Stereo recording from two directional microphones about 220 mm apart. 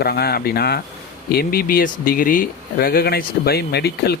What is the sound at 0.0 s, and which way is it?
Speech, 45° left (ahead or behind).